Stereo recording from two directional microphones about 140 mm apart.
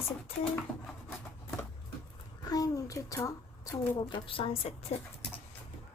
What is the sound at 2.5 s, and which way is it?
A woman's voice, 25° left (ahead or behind).